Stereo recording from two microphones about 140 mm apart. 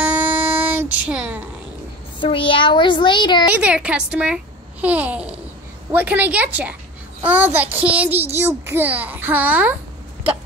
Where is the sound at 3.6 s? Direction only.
10° right (ahead or behind).